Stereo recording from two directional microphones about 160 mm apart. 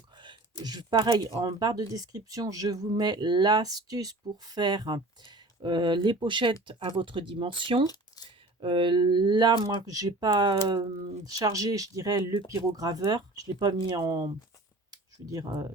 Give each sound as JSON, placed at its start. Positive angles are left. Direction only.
{"t": 0.6, "sound": "speech", "side_deg": -25}
{"t": 7.9, "sound": "speech", "side_deg": 25}
{"t": 8.6, "sound": "speech", "side_deg": -30}
{"t": 14.8, "sound": "a sound", "side_deg": -25}